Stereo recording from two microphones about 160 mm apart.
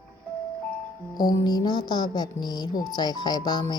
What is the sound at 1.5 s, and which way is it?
Speech, 25° left (ahead or behind).